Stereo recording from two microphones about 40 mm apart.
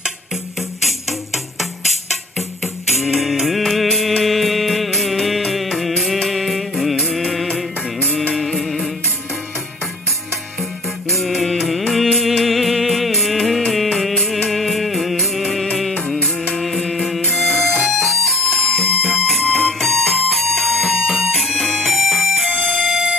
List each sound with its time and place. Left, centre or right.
0.6 s music: centre
8.0 s music: left
8.4 s music: centre
10.6 s music: centre
22.5 s music: centre